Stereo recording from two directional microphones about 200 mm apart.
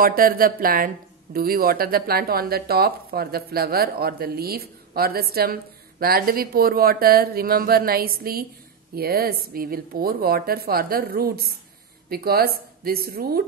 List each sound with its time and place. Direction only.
0.0 s speech: 45° right (ahead or behind)